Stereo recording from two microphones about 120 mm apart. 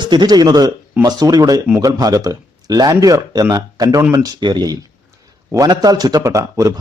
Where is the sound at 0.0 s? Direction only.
40° right (ahead or behind).